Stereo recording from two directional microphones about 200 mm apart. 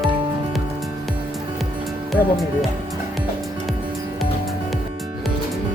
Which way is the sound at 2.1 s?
Centre (ahead or behind).